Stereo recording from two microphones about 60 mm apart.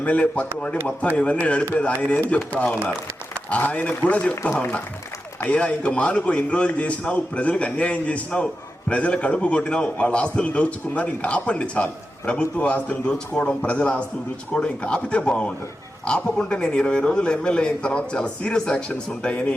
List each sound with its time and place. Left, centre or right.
0.0 s a man's voice: left